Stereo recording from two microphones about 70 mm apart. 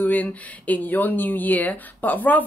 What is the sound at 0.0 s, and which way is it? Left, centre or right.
Speech, left.